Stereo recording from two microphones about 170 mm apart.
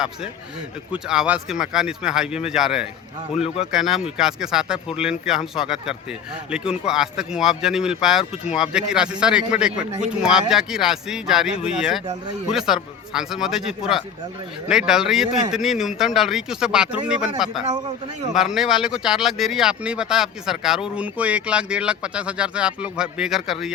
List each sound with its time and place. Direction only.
1.0 s speech: 5° right (ahead or behind)
3.3 s speech: 35° left (ahead or behind)
3.7 s speech: centre (ahead or behind)